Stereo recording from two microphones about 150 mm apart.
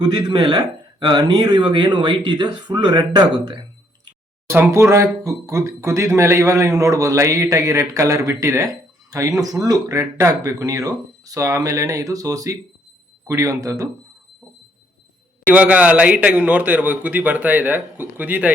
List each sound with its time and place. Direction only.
0.0 s speech: 30° right (ahead or behind)
4.4 s speech: 15° right (ahead or behind)
15.4 s a man's voice: 10° right (ahead or behind)